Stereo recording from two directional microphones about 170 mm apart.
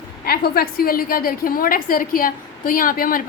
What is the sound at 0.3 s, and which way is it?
A woman's voice, 65° left (ahead or behind).